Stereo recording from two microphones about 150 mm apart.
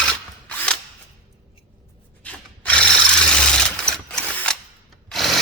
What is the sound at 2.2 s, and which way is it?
Rub, 10° left (ahead or behind).